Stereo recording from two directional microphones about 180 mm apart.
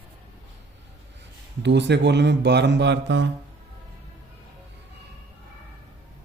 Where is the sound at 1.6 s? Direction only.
70° right (ahead or behind).